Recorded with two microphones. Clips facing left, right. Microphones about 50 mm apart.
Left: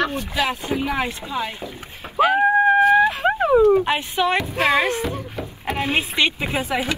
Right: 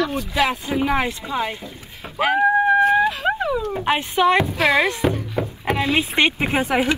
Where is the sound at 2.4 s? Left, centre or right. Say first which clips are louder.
Right 1 dB; left.